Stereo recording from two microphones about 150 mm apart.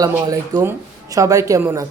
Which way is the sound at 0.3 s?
20° right (ahead or behind).